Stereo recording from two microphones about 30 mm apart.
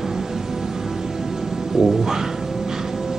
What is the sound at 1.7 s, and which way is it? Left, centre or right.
Music, centre.